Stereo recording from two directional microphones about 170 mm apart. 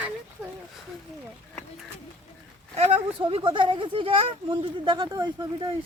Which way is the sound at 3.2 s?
30° right (ahead or behind).